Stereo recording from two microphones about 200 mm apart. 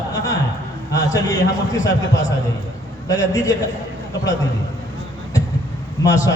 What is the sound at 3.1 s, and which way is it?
Speech, 15° left (ahead or behind).